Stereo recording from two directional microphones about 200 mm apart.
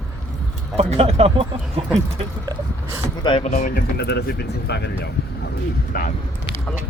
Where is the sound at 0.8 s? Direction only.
30° right (ahead or behind).